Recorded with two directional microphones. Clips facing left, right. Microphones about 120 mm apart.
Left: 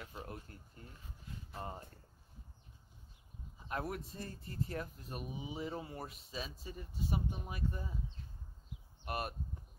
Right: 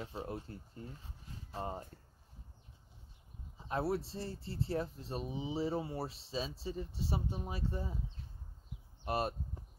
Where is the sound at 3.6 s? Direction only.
30° right (ahead or behind).